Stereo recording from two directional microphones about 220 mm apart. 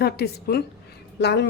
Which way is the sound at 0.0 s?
45° left (ahead or behind).